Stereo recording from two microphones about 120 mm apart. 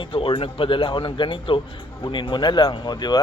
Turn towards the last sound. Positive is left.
turn(degrees=35)  # may be behind; listen again after turning